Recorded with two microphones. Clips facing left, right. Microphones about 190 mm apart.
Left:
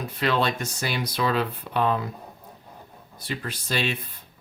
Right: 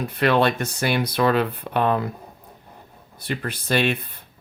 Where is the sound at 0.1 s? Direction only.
60° right (ahead or behind).